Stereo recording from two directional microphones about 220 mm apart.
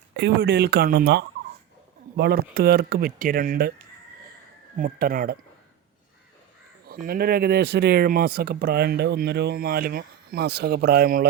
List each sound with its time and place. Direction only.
0.2 s speech: 50° right (ahead or behind)
4.8 s speech: 40° right (ahead or behind)
6.8 s speech: 40° right (ahead or behind)